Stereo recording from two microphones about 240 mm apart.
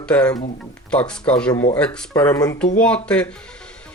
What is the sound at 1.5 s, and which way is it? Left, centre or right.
Speech, left.